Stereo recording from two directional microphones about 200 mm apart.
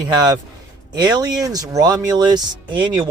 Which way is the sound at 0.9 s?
20° right (ahead or behind).